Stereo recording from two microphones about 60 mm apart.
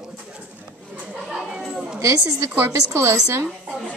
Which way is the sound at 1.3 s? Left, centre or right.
Centre.